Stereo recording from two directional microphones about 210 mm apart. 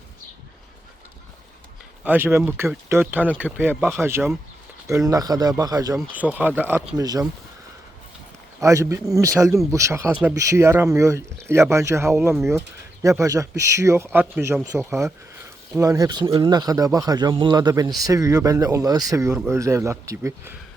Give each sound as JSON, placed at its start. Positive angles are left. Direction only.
{"t": 2.0, "sound": "speech", "side_deg": -10}
{"t": 6.0, "sound": "speech", "side_deg": -5}
{"t": 8.6, "sound": "speech", "side_deg": -15}